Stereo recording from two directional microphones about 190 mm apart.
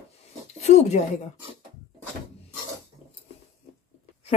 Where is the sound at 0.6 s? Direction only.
35° left (ahead or behind).